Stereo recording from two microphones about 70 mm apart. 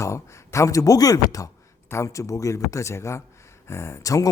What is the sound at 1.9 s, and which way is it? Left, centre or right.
Speech, left.